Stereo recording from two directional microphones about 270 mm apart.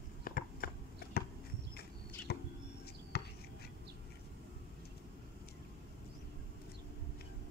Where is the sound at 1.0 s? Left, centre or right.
Left.